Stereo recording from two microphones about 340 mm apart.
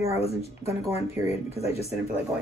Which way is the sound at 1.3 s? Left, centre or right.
Centre.